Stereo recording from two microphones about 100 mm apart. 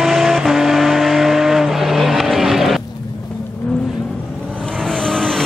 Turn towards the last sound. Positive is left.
turn(degrees=5)  # may be behind; listen again after turning